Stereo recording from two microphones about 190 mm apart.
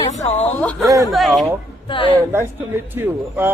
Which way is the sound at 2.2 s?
15° right (ahead or behind).